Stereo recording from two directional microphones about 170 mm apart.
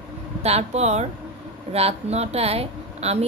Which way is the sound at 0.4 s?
40° right (ahead or behind).